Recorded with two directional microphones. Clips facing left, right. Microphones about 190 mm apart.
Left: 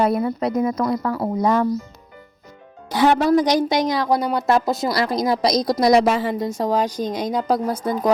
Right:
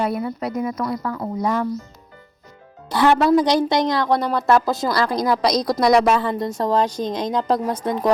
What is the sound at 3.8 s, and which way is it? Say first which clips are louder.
Speech: even; 5° left (ahead or behind).